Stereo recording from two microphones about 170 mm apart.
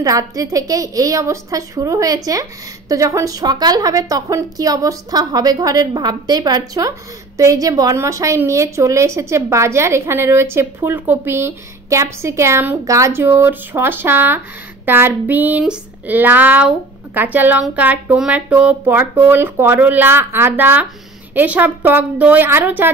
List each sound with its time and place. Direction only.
0.0 s a woman's voice: 20° right (ahead or behind)